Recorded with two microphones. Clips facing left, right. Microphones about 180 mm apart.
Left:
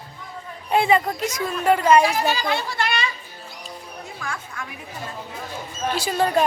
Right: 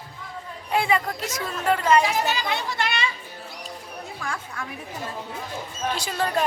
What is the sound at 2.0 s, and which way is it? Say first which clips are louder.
A child's voice: left 3 dB; 20° right (ahead or behind).